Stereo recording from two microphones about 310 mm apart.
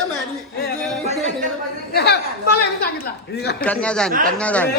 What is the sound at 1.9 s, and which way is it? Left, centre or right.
A woman's voice, left.